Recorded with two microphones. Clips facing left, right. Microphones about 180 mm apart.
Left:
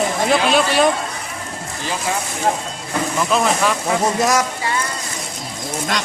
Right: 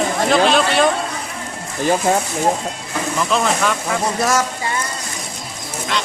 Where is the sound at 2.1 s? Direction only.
45° right (ahead or behind).